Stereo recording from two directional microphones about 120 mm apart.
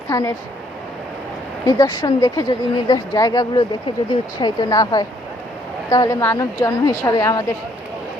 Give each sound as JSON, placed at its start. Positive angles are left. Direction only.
{"t": 0.1, "sound": "speech", "side_deg": 25}
{"t": 1.6, "sound": "a woman's voice", "side_deg": 30}